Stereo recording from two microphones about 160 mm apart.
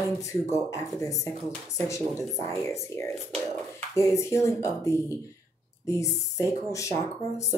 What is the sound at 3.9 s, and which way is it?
Speech, 20° left (ahead or behind).